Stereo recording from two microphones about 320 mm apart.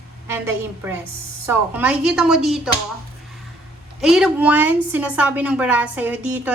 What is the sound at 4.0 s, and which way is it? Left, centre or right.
A woman's voice, centre.